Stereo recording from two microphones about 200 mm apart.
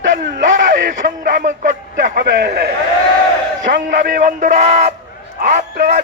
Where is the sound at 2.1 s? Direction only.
55° right (ahead or behind).